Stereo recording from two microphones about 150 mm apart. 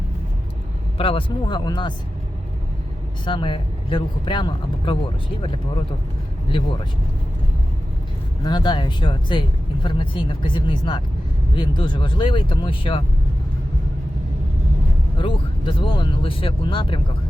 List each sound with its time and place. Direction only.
0.9 s speech: 35° left (ahead or behind)
3.2 s speech: 35° left (ahead or behind)
8.4 s speech: 30° left (ahead or behind)
15.2 s speech: 35° left (ahead or behind)